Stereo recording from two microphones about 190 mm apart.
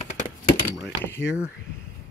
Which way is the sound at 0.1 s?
40° left (ahead or behind).